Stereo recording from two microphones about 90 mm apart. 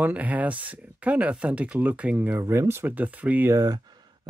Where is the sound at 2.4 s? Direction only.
30° right (ahead or behind).